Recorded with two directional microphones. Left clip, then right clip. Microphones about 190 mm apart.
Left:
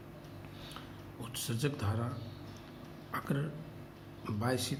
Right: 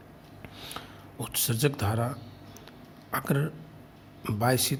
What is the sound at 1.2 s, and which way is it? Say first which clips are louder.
Speech: right 9 dB; 60° right (ahead or behind).